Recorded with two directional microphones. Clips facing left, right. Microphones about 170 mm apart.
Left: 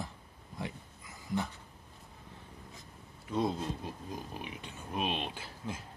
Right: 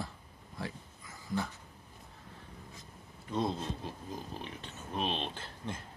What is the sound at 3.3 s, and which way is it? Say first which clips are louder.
Speech: left 1 dB; 10° left (ahead or behind).